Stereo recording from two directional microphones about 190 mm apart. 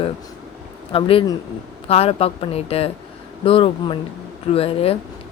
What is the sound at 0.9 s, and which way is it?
Speech, 30° left (ahead or behind).